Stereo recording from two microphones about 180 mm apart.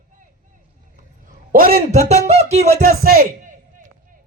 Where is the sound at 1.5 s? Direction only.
55° right (ahead or behind).